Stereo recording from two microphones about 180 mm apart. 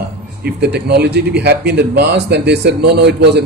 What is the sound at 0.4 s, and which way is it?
A woman's voice, 65° right (ahead or behind).